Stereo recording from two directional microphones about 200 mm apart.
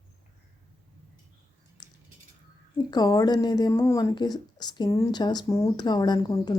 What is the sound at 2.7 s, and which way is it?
Speech, 20° left (ahead or behind).